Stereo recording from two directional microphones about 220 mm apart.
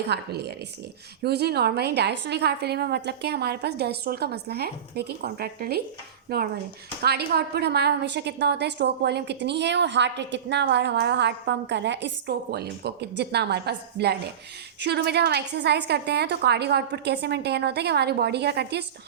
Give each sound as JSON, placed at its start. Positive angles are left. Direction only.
{"t": 0.1, "sound": "a woman's voice", "side_deg": -50}